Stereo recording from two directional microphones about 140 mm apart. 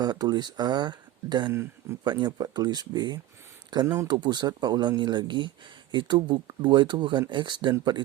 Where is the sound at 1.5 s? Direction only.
20° right (ahead or behind).